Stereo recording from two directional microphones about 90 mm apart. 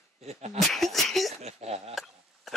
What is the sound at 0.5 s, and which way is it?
Speech, centre (ahead or behind).